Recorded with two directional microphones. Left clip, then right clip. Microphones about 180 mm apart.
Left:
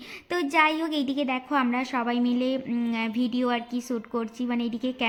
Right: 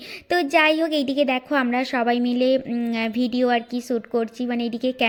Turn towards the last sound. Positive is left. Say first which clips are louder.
# right 6 dB
turn(degrees=-20)  # may be behind; listen again after turning